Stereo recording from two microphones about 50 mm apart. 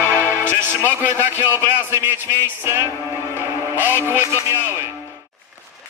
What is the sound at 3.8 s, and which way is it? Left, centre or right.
Music, right.